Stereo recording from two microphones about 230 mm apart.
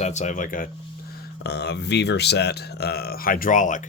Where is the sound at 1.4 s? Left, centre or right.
Left.